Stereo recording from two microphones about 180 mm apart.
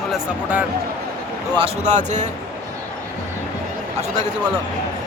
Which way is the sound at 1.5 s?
35° right (ahead or behind).